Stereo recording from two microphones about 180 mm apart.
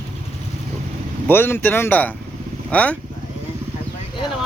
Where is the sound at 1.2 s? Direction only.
10° left (ahead or behind).